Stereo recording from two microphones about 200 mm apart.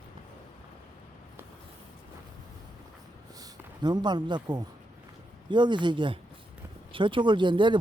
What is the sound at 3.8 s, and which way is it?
Speech, 20° right (ahead or behind).